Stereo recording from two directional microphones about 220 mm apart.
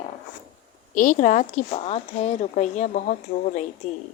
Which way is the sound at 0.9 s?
35° left (ahead or behind).